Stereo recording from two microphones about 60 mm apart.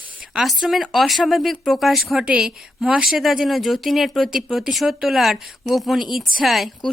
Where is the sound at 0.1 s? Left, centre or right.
Right.